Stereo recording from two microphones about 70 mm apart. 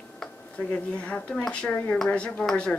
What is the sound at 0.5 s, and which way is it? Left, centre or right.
Speech, centre.